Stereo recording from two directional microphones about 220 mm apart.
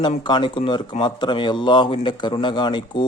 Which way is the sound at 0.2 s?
20° left (ahead or behind).